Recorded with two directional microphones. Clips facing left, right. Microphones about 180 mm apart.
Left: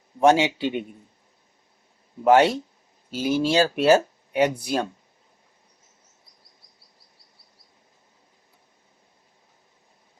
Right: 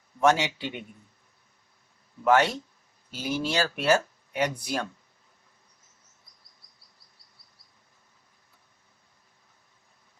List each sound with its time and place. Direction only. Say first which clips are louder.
0.2 s speech: left 5 dB; 20° left (ahead or behind)
2.2 s speech: left 5 dB; 25° left (ahead or behind)